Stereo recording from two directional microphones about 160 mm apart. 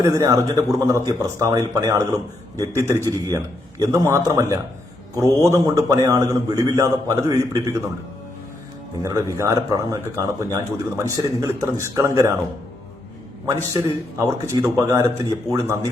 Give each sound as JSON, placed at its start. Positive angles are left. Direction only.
{"t": 0.0, "sound": "speech", "side_deg": -20}
{"t": 9.0, "sound": "speech", "side_deg": -20}
{"t": 13.6, "sound": "speech", "side_deg": -20}